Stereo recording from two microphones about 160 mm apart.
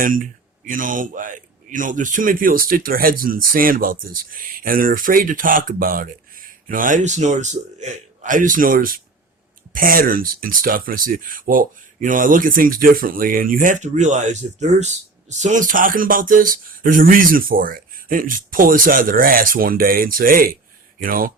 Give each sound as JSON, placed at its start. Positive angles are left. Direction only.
{"t": 0.0, "sound": "speech", "side_deg": -60}